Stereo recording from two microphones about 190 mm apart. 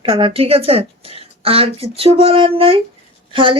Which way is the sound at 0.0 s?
30° right (ahead or behind).